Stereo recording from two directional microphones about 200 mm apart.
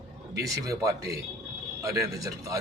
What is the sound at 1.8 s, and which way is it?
Speech, 15° right (ahead or behind).